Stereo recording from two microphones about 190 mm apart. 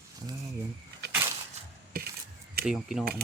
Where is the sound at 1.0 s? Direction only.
60° right (ahead or behind).